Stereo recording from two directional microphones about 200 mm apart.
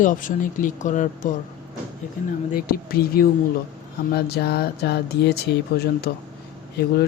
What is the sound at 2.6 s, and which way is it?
Speech, 50° left (ahead or behind).